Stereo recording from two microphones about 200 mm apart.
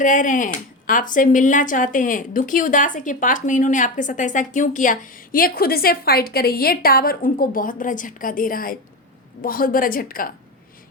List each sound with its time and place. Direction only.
0.0 s a woman's voice: 40° left (ahead or behind)